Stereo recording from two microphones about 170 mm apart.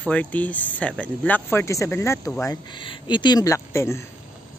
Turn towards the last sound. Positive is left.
turn(degrees=15)  # may be behind; listen again after turning